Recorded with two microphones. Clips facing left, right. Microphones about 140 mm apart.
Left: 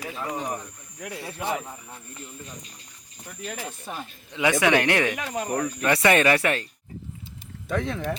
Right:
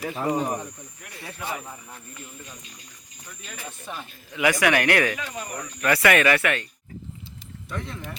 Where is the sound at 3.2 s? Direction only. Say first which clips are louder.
Left 7 dB; 60° left (ahead or behind).